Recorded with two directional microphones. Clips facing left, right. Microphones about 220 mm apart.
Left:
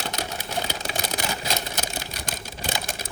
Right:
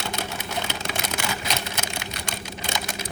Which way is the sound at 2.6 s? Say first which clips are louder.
Left 1 dB; 50° left (ahead or behind).